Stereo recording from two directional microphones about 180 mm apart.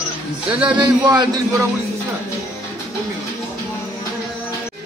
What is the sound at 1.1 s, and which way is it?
Speech, 20° right (ahead or behind).